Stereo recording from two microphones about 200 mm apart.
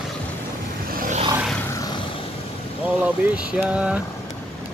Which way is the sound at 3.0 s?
5° right (ahead or behind).